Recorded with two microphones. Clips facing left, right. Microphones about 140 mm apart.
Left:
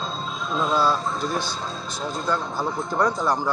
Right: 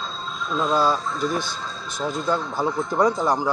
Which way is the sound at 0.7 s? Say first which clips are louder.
Right 1 dB; 15° right (ahead or behind).